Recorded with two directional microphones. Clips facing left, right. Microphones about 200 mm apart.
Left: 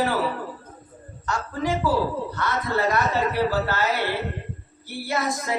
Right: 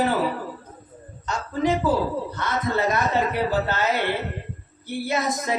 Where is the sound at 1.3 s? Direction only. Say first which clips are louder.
Right 3 dB; 20° right (ahead or behind).